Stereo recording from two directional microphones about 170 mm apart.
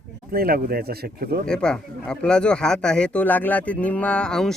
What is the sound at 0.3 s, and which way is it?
Speech, 60° right (ahead or behind).